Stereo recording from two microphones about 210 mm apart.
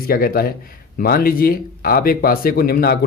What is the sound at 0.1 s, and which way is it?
Speech, 45° left (ahead or behind).